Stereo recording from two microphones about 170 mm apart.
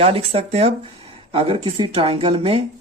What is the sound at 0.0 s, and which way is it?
Speech, 35° right (ahead or behind).